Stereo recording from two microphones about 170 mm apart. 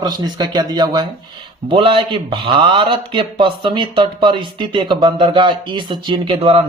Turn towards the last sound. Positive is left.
turn(degrees=-30)  # may be behind; listen again after turning